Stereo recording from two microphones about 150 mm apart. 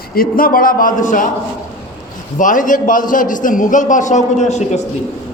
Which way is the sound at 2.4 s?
60° left (ahead or behind).